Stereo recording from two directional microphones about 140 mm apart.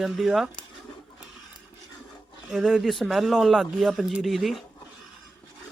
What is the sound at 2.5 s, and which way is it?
Speech, 5° right (ahead or behind).